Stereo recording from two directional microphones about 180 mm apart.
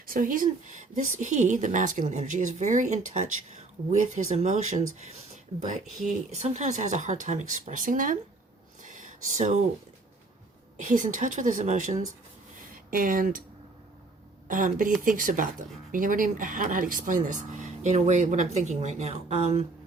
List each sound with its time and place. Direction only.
0.0 s a woman's voice: 50° right (ahead or behind)
8.8 s a sound: 45° right (ahead or behind)
10.8 s a woman's voice: 45° right (ahead or behind)
14.4 s a woman's voice: 50° right (ahead or behind)